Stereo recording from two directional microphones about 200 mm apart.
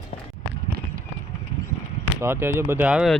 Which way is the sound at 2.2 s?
10° right (ahead or behind).